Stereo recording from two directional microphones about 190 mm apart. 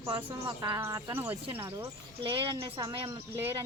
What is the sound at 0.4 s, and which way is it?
Speech, 20° right (ahead or behind).